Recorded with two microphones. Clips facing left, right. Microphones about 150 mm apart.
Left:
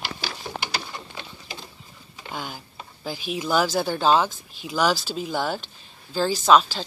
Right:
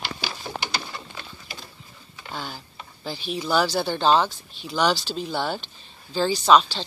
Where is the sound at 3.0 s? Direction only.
10° left (ahead or behind).